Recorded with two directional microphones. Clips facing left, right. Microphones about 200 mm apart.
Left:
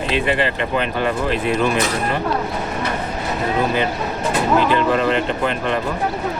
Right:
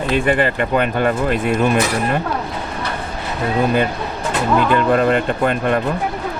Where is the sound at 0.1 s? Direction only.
50° right (ahead or behind).